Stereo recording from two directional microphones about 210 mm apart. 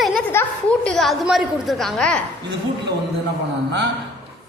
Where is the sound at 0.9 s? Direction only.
Centre (ahead or behind).